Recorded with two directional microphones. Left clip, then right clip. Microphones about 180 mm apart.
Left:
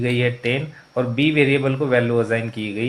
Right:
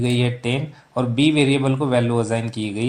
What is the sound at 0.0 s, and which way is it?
A man's voice, 30° right (ahead or behind).